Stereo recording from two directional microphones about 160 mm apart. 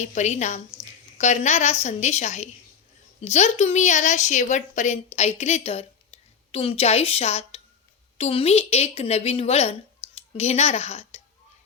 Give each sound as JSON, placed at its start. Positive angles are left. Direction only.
{"t": 0.0, "sound": "a woman's voice", "side_deg": 45}